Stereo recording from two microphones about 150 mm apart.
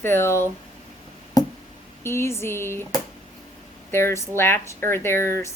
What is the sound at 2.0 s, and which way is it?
Speech, 15° left (ahead or behind).